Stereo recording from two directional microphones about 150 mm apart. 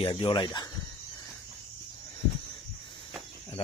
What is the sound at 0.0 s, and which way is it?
Speech, 35° left (ahead or behind).